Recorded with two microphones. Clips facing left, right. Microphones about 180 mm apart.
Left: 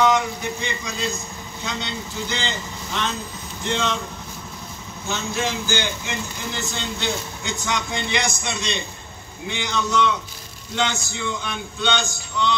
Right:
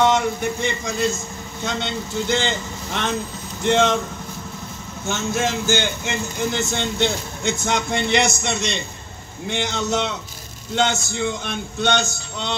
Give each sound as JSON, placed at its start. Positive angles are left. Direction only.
{"t": 0.0, "sound": "a man's voice", "side_deg": -50}
{"t": 5.0, "sound": "a man's voice", "side_deg": -50}